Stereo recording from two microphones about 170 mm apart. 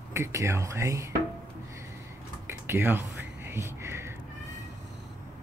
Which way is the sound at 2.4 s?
15° right (ahead or behind).